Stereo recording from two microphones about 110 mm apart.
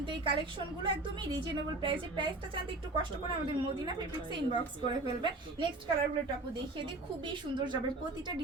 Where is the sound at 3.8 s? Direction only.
45° right (ahead or behind).